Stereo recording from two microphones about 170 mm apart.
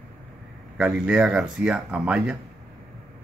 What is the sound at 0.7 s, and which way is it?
Speech, 5° right (ahead or behind).